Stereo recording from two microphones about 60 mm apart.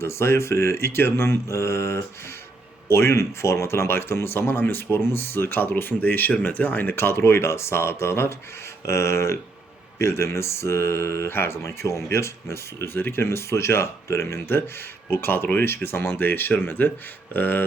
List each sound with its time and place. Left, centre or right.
0.0 s speech: left